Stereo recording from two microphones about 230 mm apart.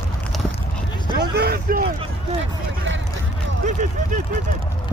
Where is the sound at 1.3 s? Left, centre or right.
Right.